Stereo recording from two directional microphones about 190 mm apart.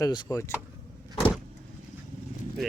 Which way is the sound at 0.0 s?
20° left (ahead or behind).